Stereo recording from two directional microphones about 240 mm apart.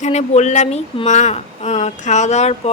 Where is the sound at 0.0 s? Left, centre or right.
Left.